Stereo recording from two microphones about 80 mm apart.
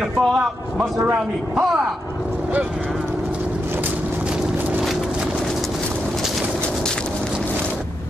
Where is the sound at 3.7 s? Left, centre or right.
Right.